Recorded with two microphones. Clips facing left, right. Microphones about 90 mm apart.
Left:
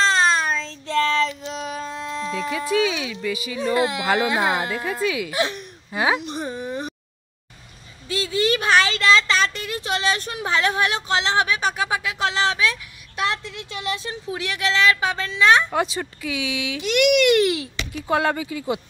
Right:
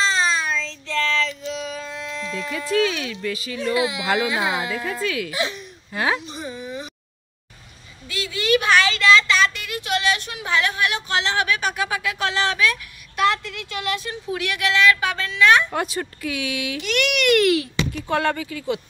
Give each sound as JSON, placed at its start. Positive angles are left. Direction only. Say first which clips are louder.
{"t": 0.0, "sound": "child singing", "louder": "left 3 dB", "side_deg": 55}
{"t": 1.5, "sound": "a sound", "louder": "left 1 dB", "side_deg": 45}
{"t": 2.5, "sound": "speech", "louder": "right 1 dB", "side_deg": 10}
{"t": 3.7, "sound": "speech", "louder": "left 1 dB", "side_deg": 45}
{"t": 4.6, "sound": "speech", "louder": "left 1 dB", "side_deg": 5}
{"t": 5.3, "sound": "speech", "louder": "left 2 dB", "side_deg": 50}
{"t": 5.9, "sound": "speech", "louder": "left 2 dB", "side_deg": 15}
{"t": 6.4, "sound": "a sound", "louder": "left 3 dB", "side_deg": 45}
{"t": 8.1, "sound": "a sound", "louder": "even", "side_deg": 30}
{"t": 15.7, "sound": "speech", "louder": "left 2 dB", "side_deg": 0}
{"t": 16.8, "sound": "a child's voice", "louder": "left 5 dB", "side_deg": 20}
{"t": 17.9, "sound": "speech", "louder": "left 2 dB", "side_deg": 10}